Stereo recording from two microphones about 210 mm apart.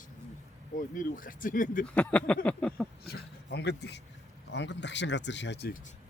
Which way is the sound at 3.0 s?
50° left (ahead or behind).